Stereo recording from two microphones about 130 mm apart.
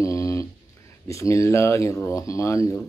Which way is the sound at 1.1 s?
25° left (ahead or behind).